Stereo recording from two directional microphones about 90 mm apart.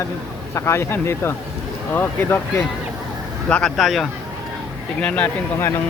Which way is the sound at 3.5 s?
5° left (ahead or behind).